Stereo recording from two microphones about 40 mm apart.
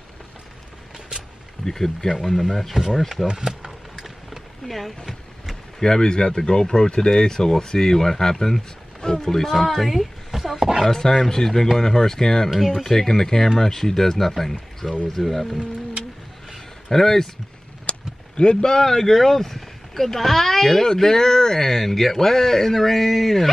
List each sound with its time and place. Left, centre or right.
1.7 s speech: centre
2.7 s speech: centre
3.0 s speech: centre
3.3 s speech: centre
4.6 s speech: centre
5.8 s speech: centre
10.9 s speech: centre
12.4 s speech: centre
14.8 s speech: left
15.2 s speech: centre
16.9 s speech: centre
17.8 s speech: left; by 23.5 s centre